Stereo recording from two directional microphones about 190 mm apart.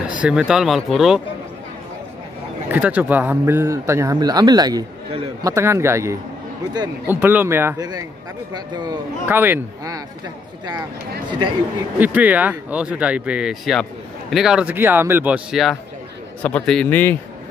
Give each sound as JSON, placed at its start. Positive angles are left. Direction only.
{"t": 0.2, "sound": "speech", "side_deg": -5}
{"t": 2.7, "sound": "speech", "side_deg": -10}
{"t": 12.0, "sound": "a man's voice", "side_deg": -10}